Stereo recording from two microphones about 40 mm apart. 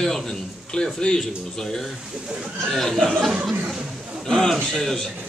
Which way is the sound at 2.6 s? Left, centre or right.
Centre.